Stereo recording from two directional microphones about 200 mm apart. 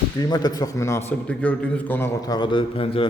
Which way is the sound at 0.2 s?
20° left (ahead or behind).